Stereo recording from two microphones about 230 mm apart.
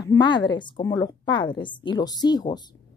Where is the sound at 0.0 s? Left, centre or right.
Centre.